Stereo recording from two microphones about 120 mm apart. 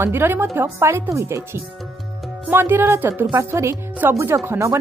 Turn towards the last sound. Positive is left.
turn(degrees=-20)  # may be behind; listen again after turning